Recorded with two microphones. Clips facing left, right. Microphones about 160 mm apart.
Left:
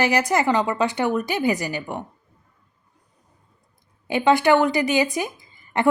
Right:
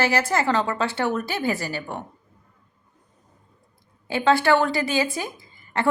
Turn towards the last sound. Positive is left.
turn(degrees=20)  # may be behind; listen again after turning